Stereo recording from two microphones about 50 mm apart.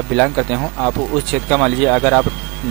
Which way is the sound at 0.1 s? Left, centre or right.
Centre.